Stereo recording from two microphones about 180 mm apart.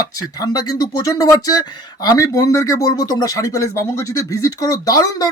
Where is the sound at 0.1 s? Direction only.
20° left (ahead or behind).